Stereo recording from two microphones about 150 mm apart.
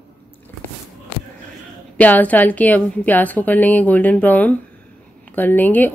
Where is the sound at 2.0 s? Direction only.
10° left (ahead or behind).